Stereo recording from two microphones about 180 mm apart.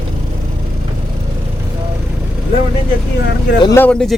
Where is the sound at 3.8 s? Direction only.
5° left (ahead or behind).